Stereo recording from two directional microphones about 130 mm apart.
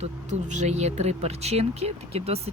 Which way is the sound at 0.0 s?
65° right (ahead or behind).